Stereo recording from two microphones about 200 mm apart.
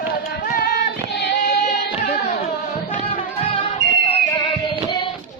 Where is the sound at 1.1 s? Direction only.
60° left (ahead or behind).